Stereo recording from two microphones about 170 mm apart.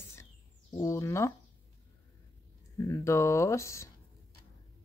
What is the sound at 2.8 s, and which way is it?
Speech, 15° left (ahead or behind).